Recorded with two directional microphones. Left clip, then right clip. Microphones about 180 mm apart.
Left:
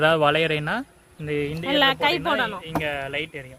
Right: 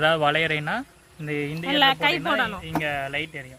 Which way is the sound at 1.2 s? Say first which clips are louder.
Left 2 dB; 65° left (ahead or behind).